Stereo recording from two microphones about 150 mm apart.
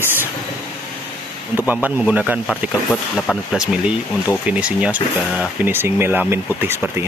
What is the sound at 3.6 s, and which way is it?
Speech, 5° right (ahead or behind).